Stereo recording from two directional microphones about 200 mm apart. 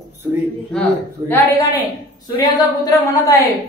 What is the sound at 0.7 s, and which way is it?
Speech, 5° left (ahead or behind).